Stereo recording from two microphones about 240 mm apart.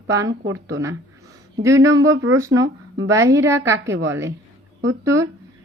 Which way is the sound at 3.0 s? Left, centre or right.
Centre.